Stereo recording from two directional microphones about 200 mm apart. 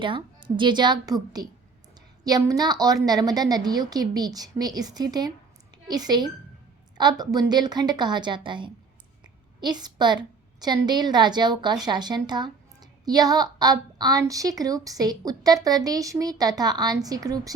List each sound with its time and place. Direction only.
0.0 s a woman's voice: 25° right (ahead or behind)